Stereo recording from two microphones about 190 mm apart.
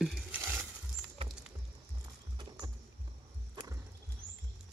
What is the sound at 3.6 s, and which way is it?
Music, 25° right (ahead or behind).